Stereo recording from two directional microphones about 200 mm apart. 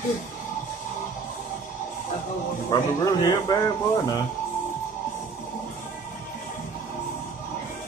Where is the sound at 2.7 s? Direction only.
15° left (ahead or behind).